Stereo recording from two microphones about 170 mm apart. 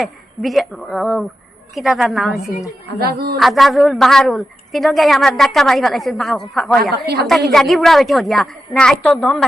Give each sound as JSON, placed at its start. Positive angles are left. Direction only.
{"t": 0.0, "sound": "a woman's voice", "side_deg": 0}
{"t": 3.0, "sound": "speech", "side_deg": -65}
{"t": 3.3, "sound": "a woman's voice", "side_deg": 0}